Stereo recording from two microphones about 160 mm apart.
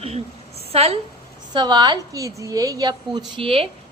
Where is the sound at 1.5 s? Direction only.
30° right (ahead or behind).